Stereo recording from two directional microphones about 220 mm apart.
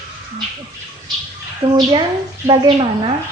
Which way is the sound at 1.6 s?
25° right (ahead or behind).